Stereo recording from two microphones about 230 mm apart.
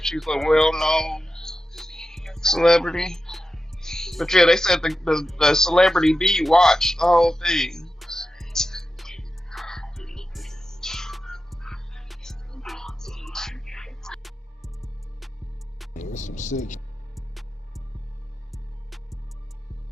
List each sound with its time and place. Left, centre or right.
0.0 s music: centre
16.0 s speech: left
17.2 s music: centre